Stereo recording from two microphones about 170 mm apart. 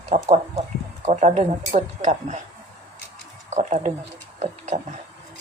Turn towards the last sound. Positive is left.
turn(degrees=-45)  # may be behind; listen again after turning